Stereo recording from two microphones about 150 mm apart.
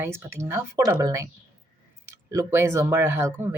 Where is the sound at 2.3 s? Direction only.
20° right (ahead or behind).